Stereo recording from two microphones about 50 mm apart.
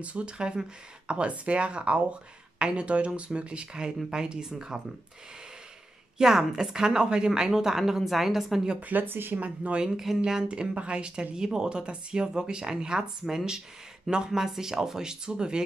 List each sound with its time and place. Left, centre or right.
0.0 s a woman's voice: right
6.1 s a woman's voice: centre
8.8 s speech: right
9.4 s speech: right
9.8 s a woman's voice: centre